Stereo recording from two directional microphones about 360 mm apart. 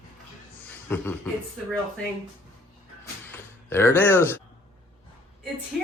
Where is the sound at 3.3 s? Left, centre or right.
Centre.